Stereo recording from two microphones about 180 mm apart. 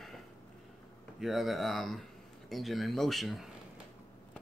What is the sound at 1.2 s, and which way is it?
Speech, centre (ahead or behind).